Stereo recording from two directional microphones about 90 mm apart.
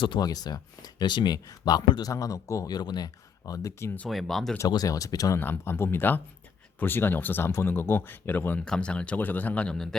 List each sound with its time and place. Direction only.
0.0 s speech: 65° left (ahead or behind)
0.3 s a man's voice: 45° left (ahead or behind)
4.1 s speech: centre (ahead or behind)
4.7 s a man's voice: 40° left (ahead or behind)
5.4 s speech: 25° left (ahead or behind)
8.6 s speech: 10° left (ahead or behind)